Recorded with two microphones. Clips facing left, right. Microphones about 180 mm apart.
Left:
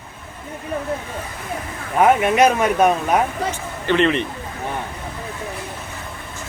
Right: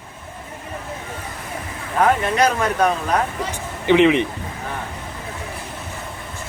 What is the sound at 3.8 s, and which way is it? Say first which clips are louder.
Speech: right 4 dB; 15° right (ahead or behind).